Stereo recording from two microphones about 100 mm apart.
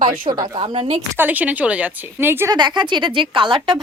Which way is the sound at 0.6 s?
65° right (ahead or behind).